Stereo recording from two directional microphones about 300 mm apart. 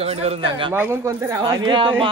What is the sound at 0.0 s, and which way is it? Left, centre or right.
A man's voice, centre.